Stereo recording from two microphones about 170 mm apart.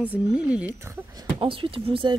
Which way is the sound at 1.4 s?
30° right (ahead or behind).